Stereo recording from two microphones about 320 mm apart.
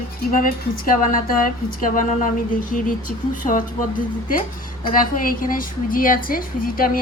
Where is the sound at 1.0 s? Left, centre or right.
Left.